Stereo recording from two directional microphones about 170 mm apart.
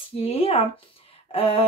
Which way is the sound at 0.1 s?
35° left (ahead or behind).